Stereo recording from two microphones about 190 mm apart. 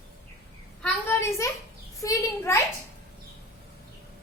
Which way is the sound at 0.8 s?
10° left (ahead or behind).